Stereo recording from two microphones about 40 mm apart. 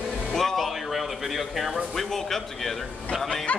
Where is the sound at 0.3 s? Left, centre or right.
Centre.